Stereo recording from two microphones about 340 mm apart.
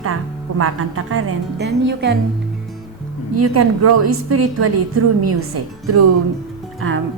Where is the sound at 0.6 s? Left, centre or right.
Right.